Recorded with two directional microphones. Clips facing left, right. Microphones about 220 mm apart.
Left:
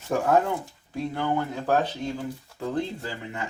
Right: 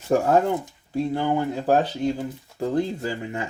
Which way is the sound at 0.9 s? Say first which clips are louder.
Right 4 dB; 30° right (ahead or behind).